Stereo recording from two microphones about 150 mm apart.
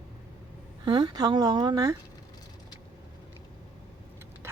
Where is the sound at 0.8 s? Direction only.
30° right (ahead or behind).